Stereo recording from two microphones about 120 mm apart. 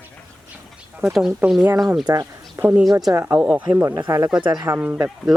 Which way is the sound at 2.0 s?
25° right (ahead or behind).